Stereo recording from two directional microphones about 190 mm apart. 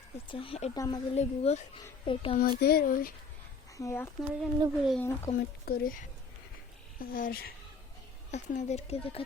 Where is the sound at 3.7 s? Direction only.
15° left (ahead or behind).